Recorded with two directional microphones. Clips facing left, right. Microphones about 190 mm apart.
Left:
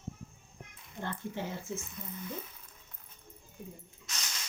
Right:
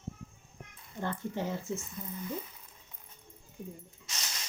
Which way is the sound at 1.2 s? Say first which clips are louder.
Right 3 dB; 45° right (ahead or behind).